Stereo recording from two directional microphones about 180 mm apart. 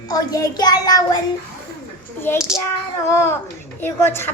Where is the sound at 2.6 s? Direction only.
15° left (ahead or behind).